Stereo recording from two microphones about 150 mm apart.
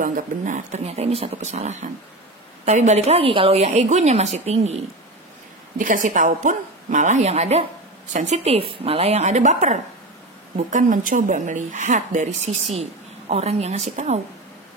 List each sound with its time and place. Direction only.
0.0 s a woman's voice: 60° right (ahead or behind)
5.8 s a woman's voice: 60° right (ahead or behind)
13.3 s a woman's voice: 45° right (ahead or behind)